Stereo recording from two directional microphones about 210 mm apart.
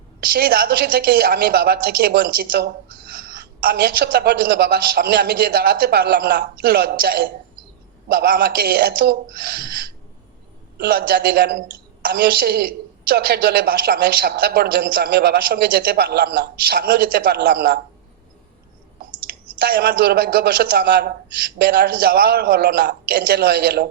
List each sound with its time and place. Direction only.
0.3 s a woman's voice: 45° right (ahead or behind)
19.5 s a woman's voice: 50° right (ahead or behind)